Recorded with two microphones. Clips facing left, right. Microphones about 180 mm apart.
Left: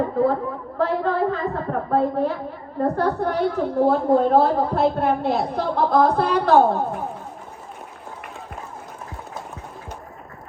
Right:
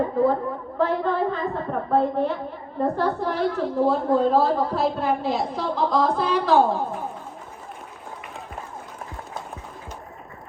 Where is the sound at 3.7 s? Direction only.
65° left (ahead or behind).